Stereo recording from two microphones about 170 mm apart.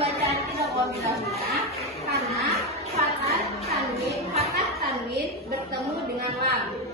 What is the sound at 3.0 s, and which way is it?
Speech, 40° right (ahead or behind).